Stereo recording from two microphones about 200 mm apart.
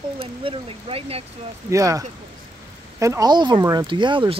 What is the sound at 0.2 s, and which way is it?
Speech, 25° right (ahead or behind).